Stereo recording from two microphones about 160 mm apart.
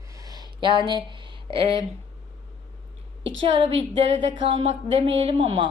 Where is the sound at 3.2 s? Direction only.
35° right (ahead or behind).